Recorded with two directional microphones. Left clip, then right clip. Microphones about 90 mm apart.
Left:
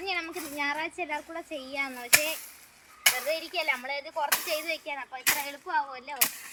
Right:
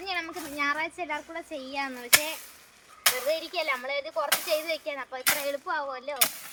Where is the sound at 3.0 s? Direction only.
35° left (ahead or behind).